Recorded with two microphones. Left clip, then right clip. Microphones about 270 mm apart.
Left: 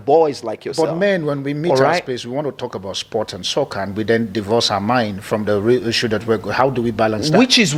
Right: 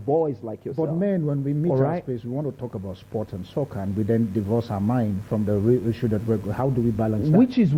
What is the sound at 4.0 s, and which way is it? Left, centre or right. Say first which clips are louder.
Speech: left 6 dB; centre.